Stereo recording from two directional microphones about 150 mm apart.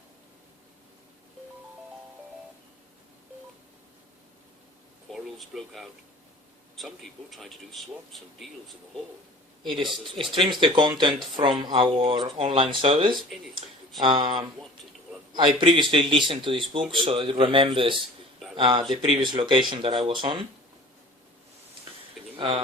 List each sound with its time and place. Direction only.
5.0 s a sound: centre (ahead or behind)
6.7 s a man's voice: centre (ahead or behind)
9.6 s speech: 30° right (ahead or behind)
22.4 s speech: 40° right (ahead or behind)